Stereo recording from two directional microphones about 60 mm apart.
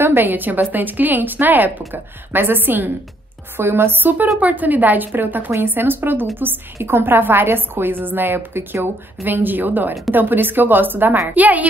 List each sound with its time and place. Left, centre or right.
0.0 s a woman's voice: right